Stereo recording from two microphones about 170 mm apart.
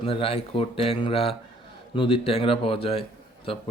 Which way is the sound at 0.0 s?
35° left (ahead or behind).